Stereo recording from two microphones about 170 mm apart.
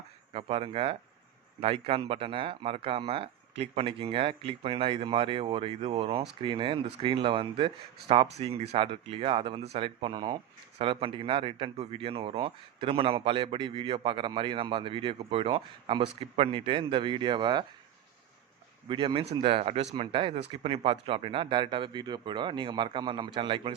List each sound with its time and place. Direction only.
0.3 s speech: 35° right (ahead or behind)
18.9 s speech: 30° right (ahead or behind)